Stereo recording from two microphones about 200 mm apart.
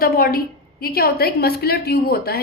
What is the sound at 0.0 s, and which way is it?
A woman's voice, 50° left (ahead or behind).